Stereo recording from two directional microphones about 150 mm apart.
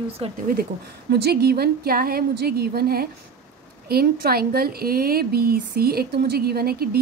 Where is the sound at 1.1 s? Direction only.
90° right.